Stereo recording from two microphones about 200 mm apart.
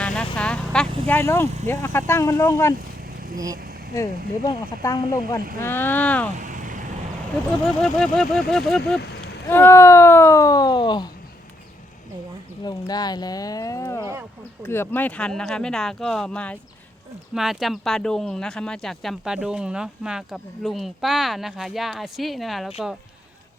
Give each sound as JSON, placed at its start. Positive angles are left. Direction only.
{"t": 0.0, "sound": "vehicle", "side_deg": 5}
{"t": 1.0, "sound": "speech", "side_deg": 10}
{"t": 3.3, "sound": "speech", "side_deg": -15}
{"t": 3.6, "sound": "vehicle", "side_deg": -50}
{"t": 4.4, "sound": "speech", "side_deg": 15}
{"t": 5.4, "sound": "speech", "side_deg": -45}
{"t": 5.6, "sound": "speech", "side_deg": 10}
{"t": 6.3, "sound": "vehicle", "side_deg": -40}
{"t": 7.8, "sound": "speech", "side_deg": 5}
{"t": 12.6, "sound": "speech", "side_deg": 20}